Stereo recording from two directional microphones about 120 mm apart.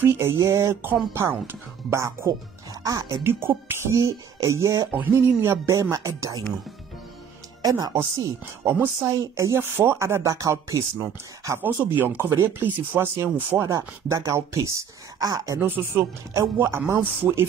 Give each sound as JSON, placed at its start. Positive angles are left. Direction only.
{"t": 0.0, "sound": "speech", "side_deg": -20}
{"t": 4.9, "sound": "speech", "side_deg": -15}
{"t": 7.6, "sound": "speech", "side_deg": -30}